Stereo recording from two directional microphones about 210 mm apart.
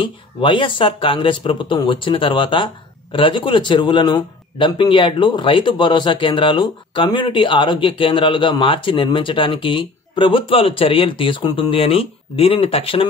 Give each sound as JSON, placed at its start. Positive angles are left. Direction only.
{"t": 0.0, "sound": "speech", "side_deg": 25}